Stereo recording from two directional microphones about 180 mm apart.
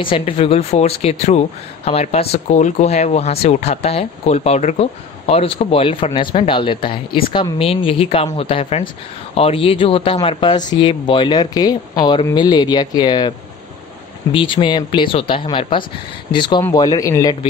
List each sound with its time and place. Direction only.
0.0 s speech: 30° left (ahead or behind)
14.3 s speech: 30° left (ahead or behind)